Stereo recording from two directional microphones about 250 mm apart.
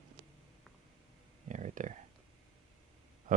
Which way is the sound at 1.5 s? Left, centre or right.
Right.